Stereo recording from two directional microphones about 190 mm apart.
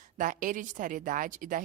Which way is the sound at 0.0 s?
45° right (ahead or behind).